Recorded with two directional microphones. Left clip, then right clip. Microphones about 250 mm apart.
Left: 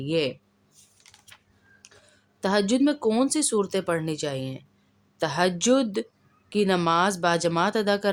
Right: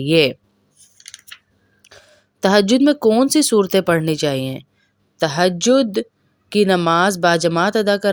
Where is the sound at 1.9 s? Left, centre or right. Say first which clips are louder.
Right 10 dB; right.